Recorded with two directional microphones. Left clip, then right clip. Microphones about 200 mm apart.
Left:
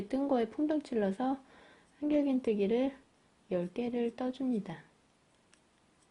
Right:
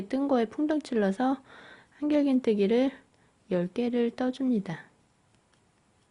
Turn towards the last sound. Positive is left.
turn(degrees=-30)  # may be behind; listen again after turning